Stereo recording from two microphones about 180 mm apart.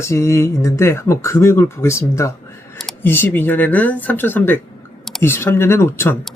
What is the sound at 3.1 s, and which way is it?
Speech, 10° left (ahead or behind).